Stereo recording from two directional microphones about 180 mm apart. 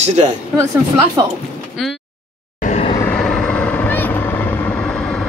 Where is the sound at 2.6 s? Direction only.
40° left (ahead or behind).